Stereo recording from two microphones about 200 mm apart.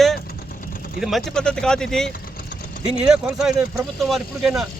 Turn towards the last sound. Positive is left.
turn(degrees=0)  # may be behind; listen again after turning